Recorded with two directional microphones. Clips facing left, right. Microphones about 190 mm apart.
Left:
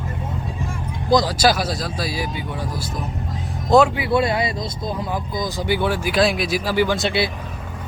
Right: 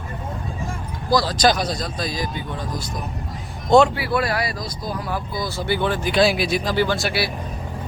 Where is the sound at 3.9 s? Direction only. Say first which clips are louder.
Left 3 dB; 20° left (ahead or behind).